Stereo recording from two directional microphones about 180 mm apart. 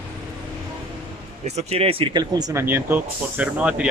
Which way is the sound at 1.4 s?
35° right (ahead or behind).